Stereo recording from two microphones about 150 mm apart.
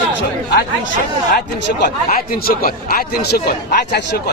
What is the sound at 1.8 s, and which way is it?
Speech, 85° left.